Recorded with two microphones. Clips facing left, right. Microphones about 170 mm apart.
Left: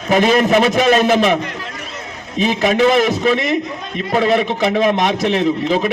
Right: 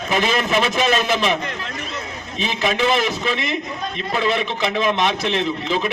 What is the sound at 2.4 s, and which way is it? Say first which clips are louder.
A man's voice: left 7 dB; 50° left (ahead or behind).